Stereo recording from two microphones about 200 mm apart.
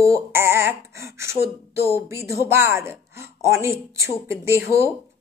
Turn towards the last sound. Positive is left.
turn(degrees=-15)  # may be behind; listen again after turning